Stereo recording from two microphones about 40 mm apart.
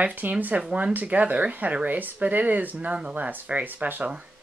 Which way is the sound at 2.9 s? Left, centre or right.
Right.